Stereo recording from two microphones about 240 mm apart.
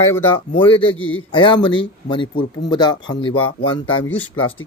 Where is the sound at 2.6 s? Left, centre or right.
Centre.